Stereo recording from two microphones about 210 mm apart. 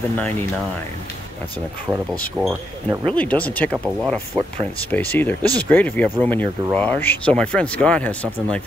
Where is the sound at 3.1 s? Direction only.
5° left (ahead or behind).